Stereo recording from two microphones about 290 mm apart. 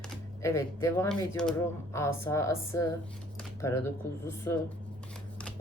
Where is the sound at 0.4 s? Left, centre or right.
Centre.